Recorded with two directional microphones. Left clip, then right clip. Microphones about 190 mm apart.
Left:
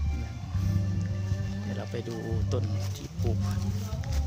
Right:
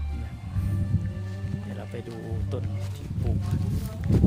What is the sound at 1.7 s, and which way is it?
Speech, 20° left (ahead or behind).